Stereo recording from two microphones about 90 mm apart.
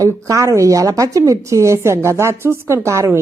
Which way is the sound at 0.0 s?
40° right (ahead or behind).